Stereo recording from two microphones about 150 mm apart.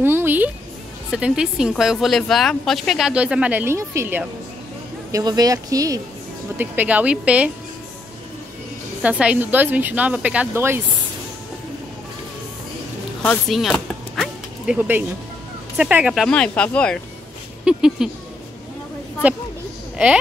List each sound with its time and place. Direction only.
0.0 s a woman's voice: 15° right (ahead or behind)
5.1 s speech: 25° right (ahead or behind)
6.6 s speech: 10° right (ahead or behind)
9.0 s speech: 10° right (ahead or behind)
13.2 s whip: 5° left (ahead or behind)
14.8 s speech: 10° right (ahead or behind)
16.3 s speech: 5° left (ahead or behind)
17.6 s a woman's voice: 5° right (ahead or behind)